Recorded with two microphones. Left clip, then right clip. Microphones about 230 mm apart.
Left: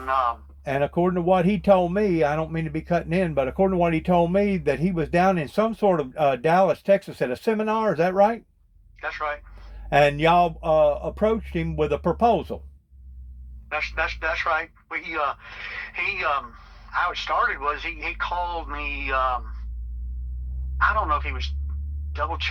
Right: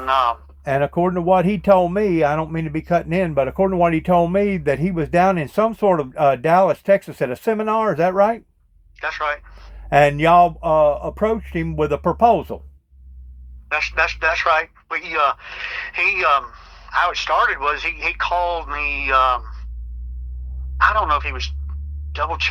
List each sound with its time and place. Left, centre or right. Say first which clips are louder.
0.0 s speech: right 5 dB; right
0.6 s speech: right 4 dB; right
9.0 s speech: right 6 dB; right
9.9 s speech: right 5 dB; right
14.1 s speech: right 7 dB; right
15.4 s speech: right 6 dB; right
16.0 s speech: right 8 dB; right
16.5 s a sound: right 6 dB; right
17.1 s speech: right 6 dB; right
17.4 s speech: right 6 dB; right
20.7 s speech: right 5 dB; right